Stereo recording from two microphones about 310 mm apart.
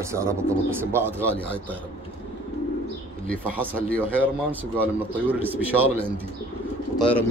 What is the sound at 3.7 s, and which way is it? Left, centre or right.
Speech, centre.